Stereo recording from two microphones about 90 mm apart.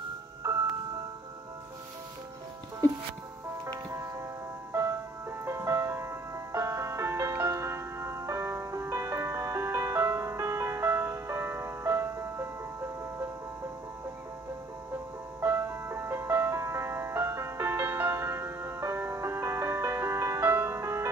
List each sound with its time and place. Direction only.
5.4 s music: 30° right (ahead or behind)
15.4 s music: 30° right (ahead or behind)